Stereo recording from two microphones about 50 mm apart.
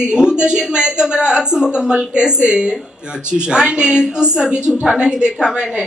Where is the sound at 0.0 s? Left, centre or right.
Centre.